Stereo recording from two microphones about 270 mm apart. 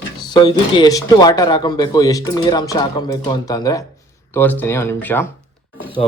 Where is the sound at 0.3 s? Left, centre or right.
Centre.